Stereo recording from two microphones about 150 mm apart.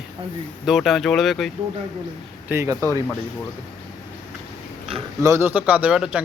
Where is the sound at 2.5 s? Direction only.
20° right (ahead or behind).